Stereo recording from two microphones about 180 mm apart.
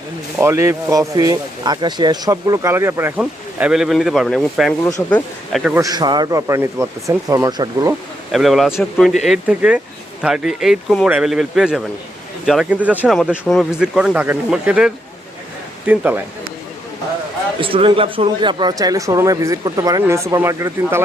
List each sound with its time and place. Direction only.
0.3 s speech: 15° right (ahead or behind)
4.8 s speech: 20° left (ahead or behind)
5.1 s speech: centre (ahead or behind)
5.7 s speech: 20° right (ahead or behind)
8.3 s speech: centre (ahead or behind)
17.6 s speech: 30° right (ahead or behind)